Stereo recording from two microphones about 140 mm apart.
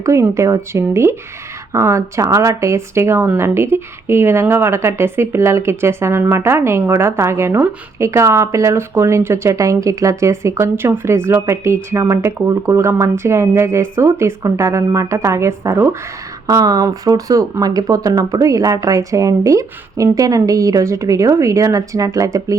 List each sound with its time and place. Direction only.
0.0 s speech: 20° right (ahead or behind)